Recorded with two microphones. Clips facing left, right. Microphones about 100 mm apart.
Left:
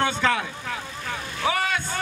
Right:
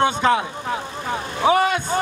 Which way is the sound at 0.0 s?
20° right (ahead or behind).